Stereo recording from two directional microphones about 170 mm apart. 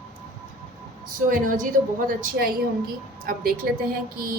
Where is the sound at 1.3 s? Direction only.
50° right (ahead or behind).